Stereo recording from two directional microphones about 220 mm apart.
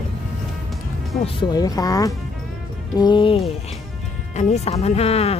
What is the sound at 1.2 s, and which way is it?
Speech, 20° left (ahead or behind).